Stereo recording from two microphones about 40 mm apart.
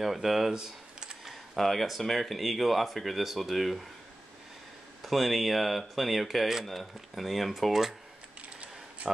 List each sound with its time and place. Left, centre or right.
0.0 s speech: centre
0.5 s speech: centre
1.2 s speech: centre
5.0 s speech: centre
8.4 s a sound: right